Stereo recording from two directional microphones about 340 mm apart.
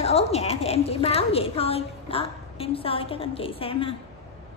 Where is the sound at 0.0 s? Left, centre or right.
Centre.